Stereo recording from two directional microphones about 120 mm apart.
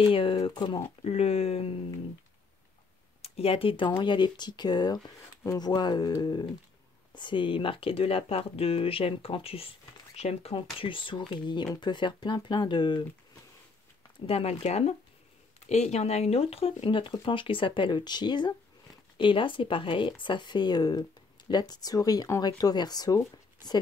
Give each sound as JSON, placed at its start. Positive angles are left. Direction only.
{"t": 0.0, "sound": "speech", "side_deg": 50}
{"t": 0.4, "sound": "speech", "side_deg": 35}
{"t": 1.0, "sound": "speech", "side_deg": 60}
{"t": 3.2, "sound": "speech", "side_deg": 55}
{"t": 14.2, "sound": "speech", "side_deg": 55}